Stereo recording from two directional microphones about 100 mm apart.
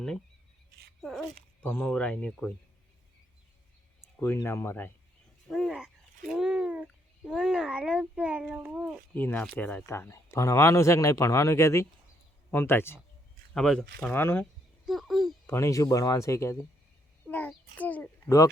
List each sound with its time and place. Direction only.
1.2 s speech: 15° left (ahead or behind)
4.2 s speech: 25° left (ahead or behind)
5.5 s a child's voice: centre (ahead or behind)
9.1 s speech: 15° left (ahead or behind)
9.8 s speech: 25° left (ahead or behind)
13.5 s speech: 5° left (ahead or behind)
14.2 s speech: 20° left (ahead or behind)
14.8 s speech: centre (ahead or behind)
15.4 s speech: 30° left (ahead or behind)
17.2 s a child's voice: 15° left (ahead or behind)